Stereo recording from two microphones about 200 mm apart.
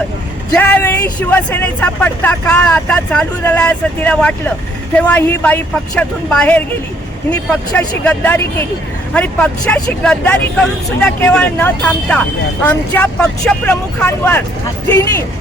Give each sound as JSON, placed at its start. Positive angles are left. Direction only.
{"t": 0.5, "sound": "speech", "side_deg": 10}
{"t": 7.8, "sound": "speech", "side_deg": 5}